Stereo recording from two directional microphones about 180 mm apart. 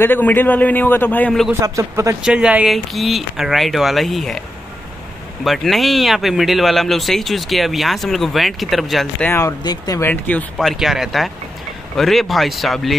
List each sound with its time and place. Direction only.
0.0 s speech: 10° left (ahead or behind)
1.5 s a man's voice: 15° right (ahead or behind); by 4.4 s centre (ahead or behind)
5.4 s speech: centre (ahead or behind)
9.3 s speech: 20° left (ahead or behind); by 12.9 s centre (ahead or behind)